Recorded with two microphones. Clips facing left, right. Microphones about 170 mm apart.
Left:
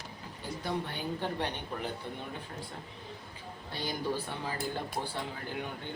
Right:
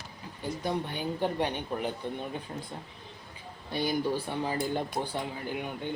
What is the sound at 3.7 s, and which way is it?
Speech, 15° right (ahead or behind).